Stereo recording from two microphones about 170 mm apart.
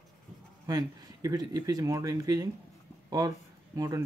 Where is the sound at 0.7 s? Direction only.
20° right (ahead or behind).